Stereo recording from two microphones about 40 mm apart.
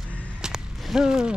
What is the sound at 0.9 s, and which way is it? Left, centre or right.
Speech, centre.